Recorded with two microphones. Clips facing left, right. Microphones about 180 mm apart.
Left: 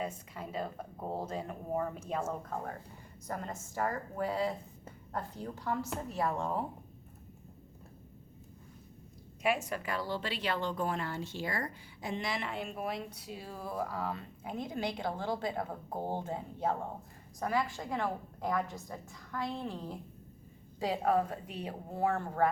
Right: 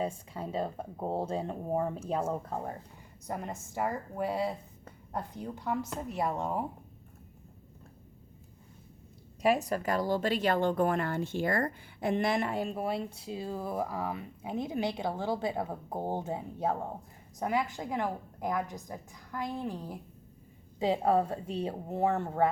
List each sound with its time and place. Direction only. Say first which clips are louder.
0.0 s a woman's voice: right 5 dB; 30° right (ahead or behind)
3.2 s a woman's voice: right 2 dB; 15° right (ahead or behind)
9.4 s a woman's voice: right 5 dB; 35° right (ahead or behind); by 16.4 s 15° right (ahead or behind)
17.4 s a woman's voice: right 2 dB; 20° right (ahead or behind)
20.7 s speech: right 3 dB; 25° right (ahead or behind)